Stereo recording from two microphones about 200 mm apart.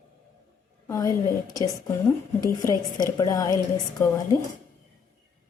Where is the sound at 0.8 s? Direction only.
15° left (ahead or behind).